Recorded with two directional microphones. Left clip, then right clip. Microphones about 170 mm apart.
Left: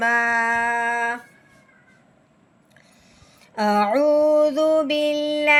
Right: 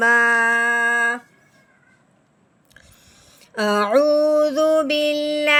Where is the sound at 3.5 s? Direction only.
50° right (ahead or behind).